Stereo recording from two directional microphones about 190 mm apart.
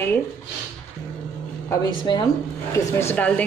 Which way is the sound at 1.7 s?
25° left (ahead or behind).